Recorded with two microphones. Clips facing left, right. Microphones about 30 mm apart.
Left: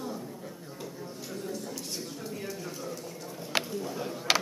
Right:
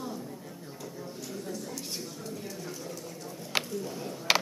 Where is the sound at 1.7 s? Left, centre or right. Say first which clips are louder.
Left 1 dB; centre.